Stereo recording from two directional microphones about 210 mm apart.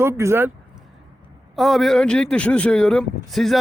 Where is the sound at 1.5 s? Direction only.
Centre (ahead or behind).